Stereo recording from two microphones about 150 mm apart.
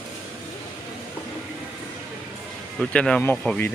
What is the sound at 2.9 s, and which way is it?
Speech, 5° left (ahead or behind).